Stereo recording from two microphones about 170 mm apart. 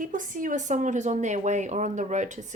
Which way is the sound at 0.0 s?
50° right (ahead or behind).